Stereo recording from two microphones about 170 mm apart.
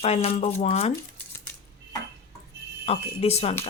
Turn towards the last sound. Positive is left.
turn(degrees=35)  # may be behind; listen again after turning